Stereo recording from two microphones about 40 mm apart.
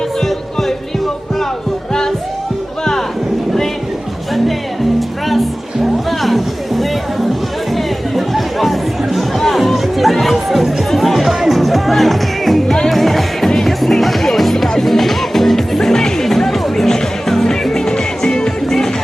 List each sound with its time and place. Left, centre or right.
0.2 s music: centre
4.9 s music: centre
7.7 s chatter: centre
12.9 s music: centre
18.6 s music: centre